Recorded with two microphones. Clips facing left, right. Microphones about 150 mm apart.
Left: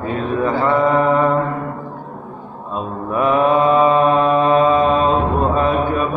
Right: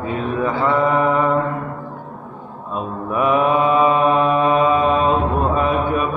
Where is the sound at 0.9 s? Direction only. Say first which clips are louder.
Left 2 dB; 10° right (ahead or behind).